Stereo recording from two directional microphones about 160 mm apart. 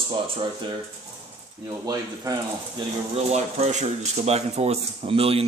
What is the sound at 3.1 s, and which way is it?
Speech, 40° right (ahead or behind).